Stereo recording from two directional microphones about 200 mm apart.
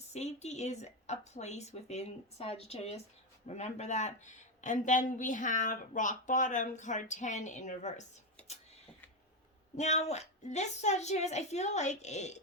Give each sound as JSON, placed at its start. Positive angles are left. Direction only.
{"t": 0.1, "sound": "speech", "side_deg": 35}
{"t": 9.7, "sound": "speech", "side_deg": 35}